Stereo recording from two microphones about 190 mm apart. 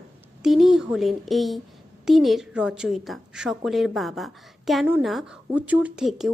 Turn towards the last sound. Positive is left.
turn(degrees=0)  # may be behind; listen again after turning